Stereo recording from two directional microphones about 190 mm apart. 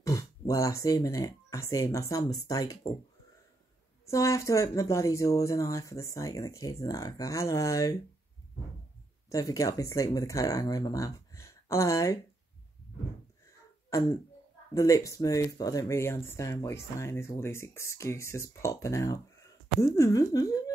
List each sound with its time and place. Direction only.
0.0 s speech: 15° left (ahead or behind)
4.1 s speech: 15° left (ahead or behind)
9.3 s speech: 15° left (ahead or behind)
13.8 s throat clearing: 15° left (ahead or behind)
14.7 s speech: 15° left (ahead or behind)